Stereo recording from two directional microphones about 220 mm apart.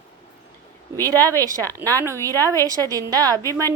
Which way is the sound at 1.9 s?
15° right (ahead or behind).